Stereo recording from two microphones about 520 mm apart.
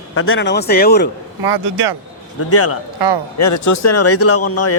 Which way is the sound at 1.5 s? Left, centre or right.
Right.